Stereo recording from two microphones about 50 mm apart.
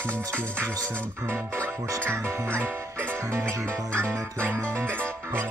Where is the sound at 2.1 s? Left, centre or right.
Right.